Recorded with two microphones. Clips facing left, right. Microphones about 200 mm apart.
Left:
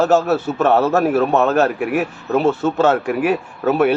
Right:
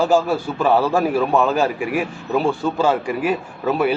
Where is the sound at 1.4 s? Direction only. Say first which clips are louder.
Left 3 dB; 70° left (ahead or behind).